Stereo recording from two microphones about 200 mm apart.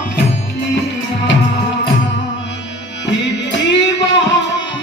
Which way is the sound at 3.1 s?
65° left (ahead or behind).